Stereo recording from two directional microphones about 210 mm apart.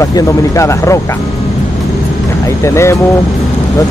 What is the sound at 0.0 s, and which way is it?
Speech, 15° left (ahead or behind).